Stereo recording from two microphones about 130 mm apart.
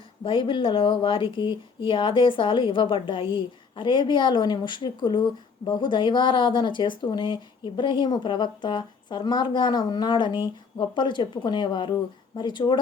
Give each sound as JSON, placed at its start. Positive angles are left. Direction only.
{"t": 0.3, "sound": "speech", "side_deg": 40}